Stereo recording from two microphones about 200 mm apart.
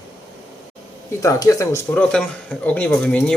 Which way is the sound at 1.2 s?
15° left (ahead or behind).